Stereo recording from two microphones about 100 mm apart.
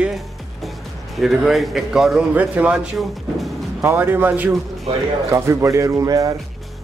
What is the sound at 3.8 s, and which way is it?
Speech, 25° right (ahead or behind).